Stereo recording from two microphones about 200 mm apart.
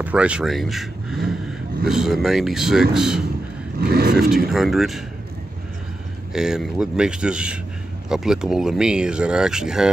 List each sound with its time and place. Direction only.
0.0 s speech: 5° right (ahead or behind)
3.8 s speech: 50° right (ahead or behind)
4.5 s speech: centre (ahead or behind)
6.3 s speech: 5° right (ahead or behind)